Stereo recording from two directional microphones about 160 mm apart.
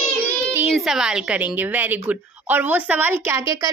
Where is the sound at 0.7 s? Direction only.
5° right (ahead or behind).